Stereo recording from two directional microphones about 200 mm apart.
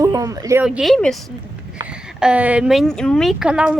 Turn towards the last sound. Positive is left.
turn(degrees=-5)  # may be behind; listen again after turning